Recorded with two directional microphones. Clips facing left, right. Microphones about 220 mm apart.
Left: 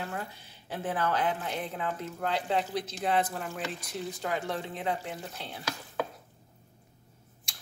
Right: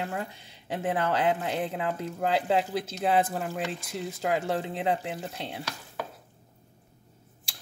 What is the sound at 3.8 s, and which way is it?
Speech, 25° right (ahead or behind).